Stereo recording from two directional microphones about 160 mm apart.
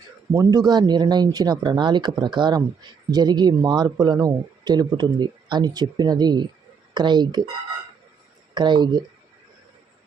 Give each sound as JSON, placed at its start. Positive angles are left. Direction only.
{"t": 0.3, "sound": "speech", "side_deg": -25}
{"t": 8.5, "sound": "speech", "side_deg": -30}